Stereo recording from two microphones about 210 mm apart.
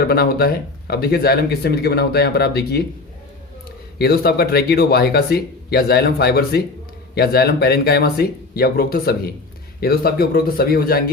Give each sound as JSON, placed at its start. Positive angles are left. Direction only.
{"t": 0.0, "sound": "speech", "side_deg": 45}
{"t": 3.9, "sound": "speech", "side_deg": 50}